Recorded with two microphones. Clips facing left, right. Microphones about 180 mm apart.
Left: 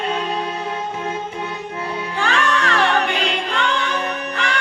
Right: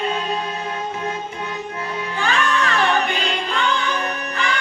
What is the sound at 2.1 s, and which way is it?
Music, 75° left (ahead or behind).